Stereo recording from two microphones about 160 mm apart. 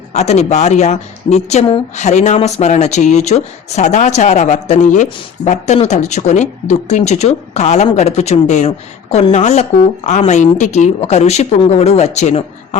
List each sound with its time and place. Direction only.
0.1 s speech: 45° left (ahead or behind)